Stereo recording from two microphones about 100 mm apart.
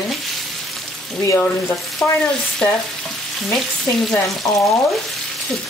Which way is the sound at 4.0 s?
Centre (ahead or behind).